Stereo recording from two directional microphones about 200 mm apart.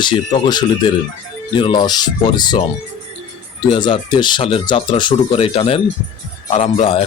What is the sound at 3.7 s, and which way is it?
Speech, 25° left (ahead or behind).